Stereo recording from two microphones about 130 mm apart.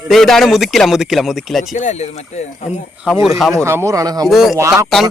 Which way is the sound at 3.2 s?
Centre (ahead or behind).